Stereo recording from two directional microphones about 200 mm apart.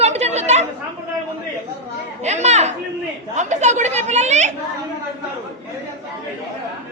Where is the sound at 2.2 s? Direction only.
35° right (ahead or behind).